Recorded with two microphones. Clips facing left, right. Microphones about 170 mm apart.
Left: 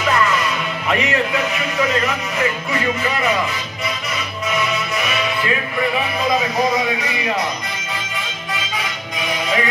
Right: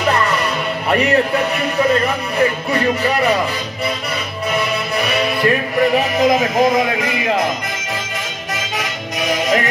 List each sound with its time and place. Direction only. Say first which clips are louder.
0.8 s speech: right 5 dB; 35° right (ahead or behind)
4.5 s music: right 2 dB; 35° right (ahead or behind)
6.2 s speech: right 4 dB; 50° right (ahead or behind)